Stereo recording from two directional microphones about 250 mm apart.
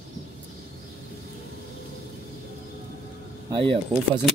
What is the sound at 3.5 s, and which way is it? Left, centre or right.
Speech, centre.